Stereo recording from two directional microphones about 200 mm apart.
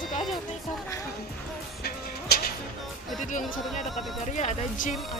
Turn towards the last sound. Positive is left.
turn(degrees=40)  # may be behind; listen again after turning